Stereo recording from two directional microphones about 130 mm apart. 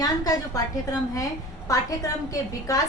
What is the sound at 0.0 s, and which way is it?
A woman's voice, 25° left (ahead or behind).